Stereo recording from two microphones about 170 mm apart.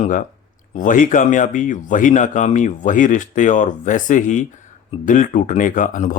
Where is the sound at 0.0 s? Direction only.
50° left (ahead or behind).